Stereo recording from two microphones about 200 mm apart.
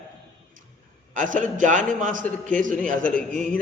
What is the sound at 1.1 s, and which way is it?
Speech, 40° right (ahead or behind).